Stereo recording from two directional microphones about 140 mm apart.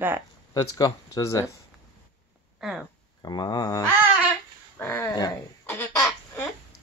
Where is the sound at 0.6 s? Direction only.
25° left (ahead or behind).